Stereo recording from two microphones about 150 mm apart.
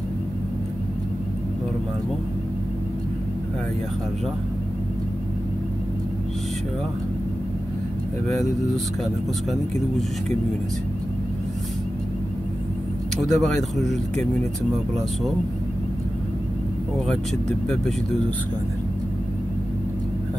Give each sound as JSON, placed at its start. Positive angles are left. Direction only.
{"t": 13.3, "sound": "speech", "side_deg": 0}
{"t": 17.1, "sound": "speech", "side_deg": 5}